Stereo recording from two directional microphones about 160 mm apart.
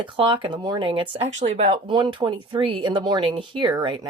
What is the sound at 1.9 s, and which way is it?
Speech, 30° right (ahead or behind).